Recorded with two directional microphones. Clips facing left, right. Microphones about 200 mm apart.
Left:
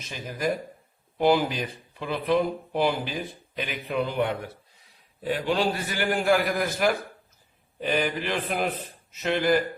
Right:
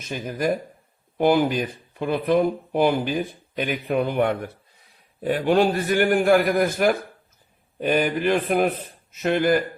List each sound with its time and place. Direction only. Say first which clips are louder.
0.1 s speech: right 4 dB; 50° right (ahead or behind)